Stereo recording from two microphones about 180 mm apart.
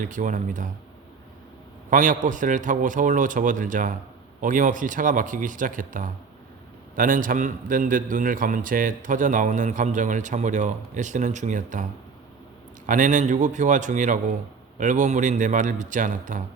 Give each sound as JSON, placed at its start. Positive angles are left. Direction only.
{"t": 0.0, "sound": "a man's voice", "side_deg": -45}
{"t": 1.9, "sound": "a man's voice", "side_deg": -45}